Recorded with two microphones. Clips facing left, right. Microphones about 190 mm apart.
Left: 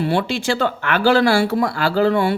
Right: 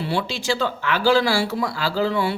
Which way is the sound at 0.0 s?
55° left (ahead or behind).